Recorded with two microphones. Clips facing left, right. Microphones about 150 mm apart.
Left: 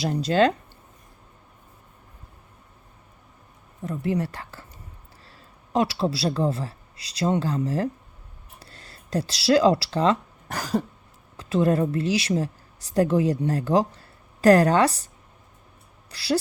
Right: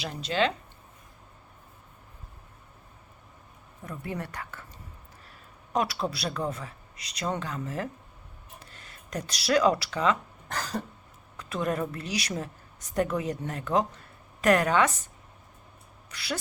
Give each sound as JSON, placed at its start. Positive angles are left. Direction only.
{"t": 0.0, "sound": "speech", "side_deg": 35}
{"t": 3.8, "sound": "a woman's voice", "side_deg": 20}
{"t": 5.7, "sound": "speech", "side_deg": 25}
{"t": 8.5, "sound": "a sound", "side_deg": 35}
{"t": 10.6, "sound": "cough", "side_deg": 10}
{"t": 11.3, "sound": "a woman's voice", "side_deg": 30}